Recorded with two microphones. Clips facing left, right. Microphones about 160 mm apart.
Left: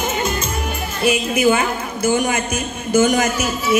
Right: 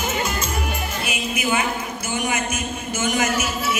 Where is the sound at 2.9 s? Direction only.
35° left (ahead or behind).